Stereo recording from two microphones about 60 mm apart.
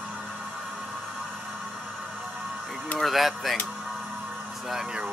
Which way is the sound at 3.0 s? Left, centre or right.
Centre.